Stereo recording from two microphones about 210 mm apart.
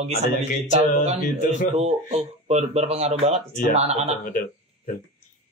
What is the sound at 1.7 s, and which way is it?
Speech, 35° right (ahead or behind).